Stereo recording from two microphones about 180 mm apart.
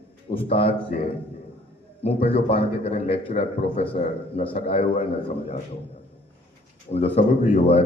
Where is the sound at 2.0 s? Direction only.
30° left (ahead or behind).